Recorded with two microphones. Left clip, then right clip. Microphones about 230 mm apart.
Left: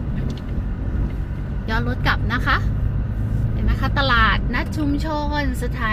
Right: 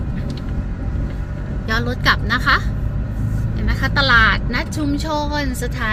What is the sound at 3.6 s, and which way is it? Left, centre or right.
A woman's voice, right.